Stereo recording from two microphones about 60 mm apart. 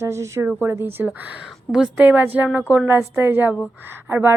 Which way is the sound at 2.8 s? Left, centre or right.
Right.